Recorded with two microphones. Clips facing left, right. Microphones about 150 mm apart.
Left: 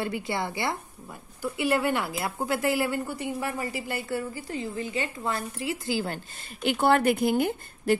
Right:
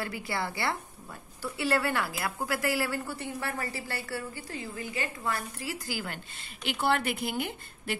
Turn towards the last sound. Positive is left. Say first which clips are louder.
# left 11 dB
turn(degrees=45)  # may be behind; listen again after turning